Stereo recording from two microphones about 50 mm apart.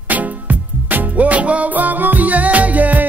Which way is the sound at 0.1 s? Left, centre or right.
Right.